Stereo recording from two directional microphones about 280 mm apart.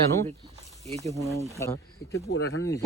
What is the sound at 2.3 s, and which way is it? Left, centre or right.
Speech, left.